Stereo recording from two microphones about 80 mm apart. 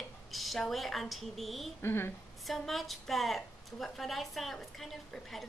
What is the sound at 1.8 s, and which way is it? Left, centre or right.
Speech, left.